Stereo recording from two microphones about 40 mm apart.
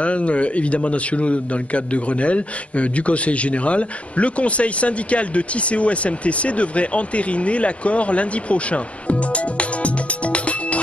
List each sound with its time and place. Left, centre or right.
0.0 s a man's voice: left